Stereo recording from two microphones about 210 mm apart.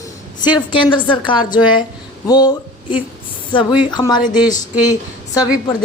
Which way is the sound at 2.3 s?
20° left (ahead or behind).